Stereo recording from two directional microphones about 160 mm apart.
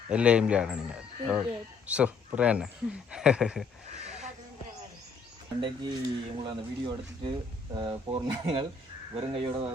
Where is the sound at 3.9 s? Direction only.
45° right (ahead or behind).